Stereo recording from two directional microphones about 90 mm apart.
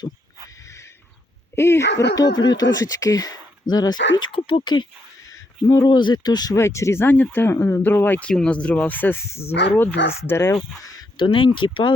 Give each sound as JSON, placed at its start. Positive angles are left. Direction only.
{"t": 1.5, "sound": "speech", "side_deg": 30}
{"t": 2.1, "sound": "speech", "side_deg": 50}
{"t": 4.3, "sound": "speech", "side_deg": 80}
{"t": 4.6, "sound": "speech", "side_deg": 55}
{"t": 6.6, "sound": "speech", "side_deg": 30}
{"t": 8.3, "sound": "speech", "side_deg": 10}
{"t": 11.2, "sound": "speech", "side_deg": 65}